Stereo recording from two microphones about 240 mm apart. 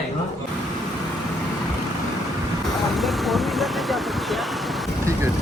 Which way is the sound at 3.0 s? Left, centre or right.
Centre.